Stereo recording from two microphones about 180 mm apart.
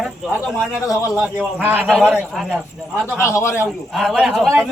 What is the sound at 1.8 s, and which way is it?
Speech, centre (ahead or behind).